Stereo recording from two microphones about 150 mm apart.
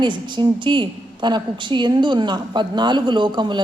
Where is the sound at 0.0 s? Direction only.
30° right (ahead or behind).